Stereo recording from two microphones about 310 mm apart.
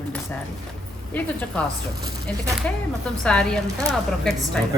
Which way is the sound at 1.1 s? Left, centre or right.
Centre.